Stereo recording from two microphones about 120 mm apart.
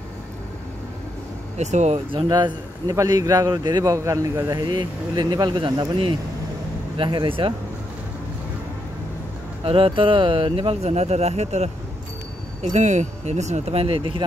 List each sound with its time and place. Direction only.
1.6 s speech: 75° right (ahead or behind)
2.0 s a man's voice: 45° right (ahead or behind)
9.7 s speech: 50° right (ahead or behind)